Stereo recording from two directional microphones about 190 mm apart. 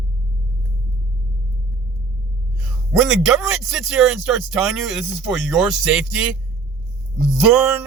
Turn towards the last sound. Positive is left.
turn(degrees=-5)  # may be behind; listen again after turning